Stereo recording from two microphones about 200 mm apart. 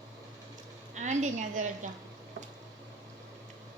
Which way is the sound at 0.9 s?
35° right (ahead or behind).